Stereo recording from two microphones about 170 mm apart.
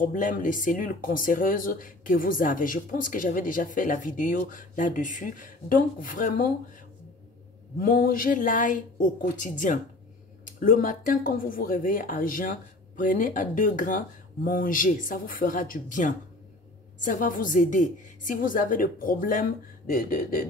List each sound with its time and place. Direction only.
0.0 s speech: 50° left (ahead or behind)
7.8 s speech: 60° left (ahead or behind)